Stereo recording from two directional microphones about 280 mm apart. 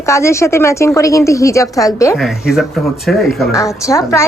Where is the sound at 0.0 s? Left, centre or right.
Centre.